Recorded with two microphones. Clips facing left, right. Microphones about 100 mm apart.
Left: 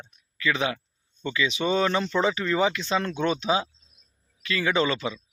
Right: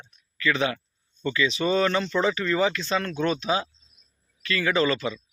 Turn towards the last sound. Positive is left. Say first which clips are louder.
# right 1 dB
turn(degrees=20)  # may be behind; listen again after turning